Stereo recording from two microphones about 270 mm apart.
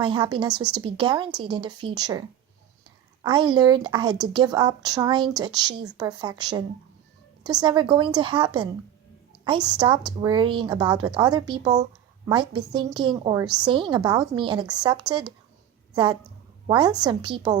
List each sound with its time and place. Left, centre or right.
0.0 s a woman's voice: centre
3.2 s a woman's voice: centre
16.6 s a woman's voice: centre